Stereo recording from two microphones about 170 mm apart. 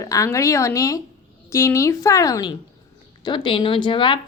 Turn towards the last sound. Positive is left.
turn(degrees=30)  # may be behind; listen again after turning